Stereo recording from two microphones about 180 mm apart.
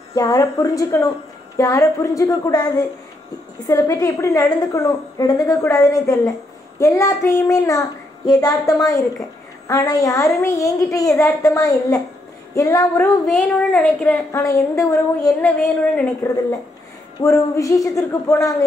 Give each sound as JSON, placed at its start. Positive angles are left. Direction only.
{"t": 0.1, "sound": "a woman's voice", "side_deg": 20}
{"t": 13.3, "sound": "speech", "side_deg": 5}
{"t": 14.3, "sound": "speech", "side_deg": 20}
{"t": 15.2, "sound": "speech", "side_deg": 5}
{"t": 17.2, "sound": "speech", "side_deg": 15}